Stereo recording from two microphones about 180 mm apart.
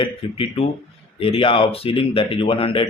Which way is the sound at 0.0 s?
30° left (ahead or behind).